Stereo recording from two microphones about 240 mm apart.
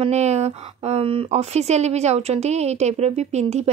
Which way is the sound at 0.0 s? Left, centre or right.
Right.